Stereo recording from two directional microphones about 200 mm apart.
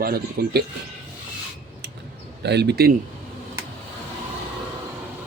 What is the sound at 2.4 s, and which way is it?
Speech, 55° right (ahead or behind).